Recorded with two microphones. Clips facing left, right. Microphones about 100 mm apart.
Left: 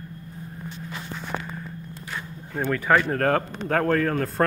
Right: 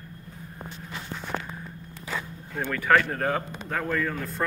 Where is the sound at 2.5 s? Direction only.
10° left (ahead or behind).